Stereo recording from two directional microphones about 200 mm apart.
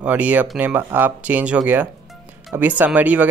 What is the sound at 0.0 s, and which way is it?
Speech, 10° right (ahead or behind).